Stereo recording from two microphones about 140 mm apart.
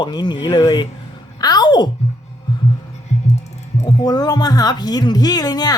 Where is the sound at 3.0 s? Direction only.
50° left (ahead or behind).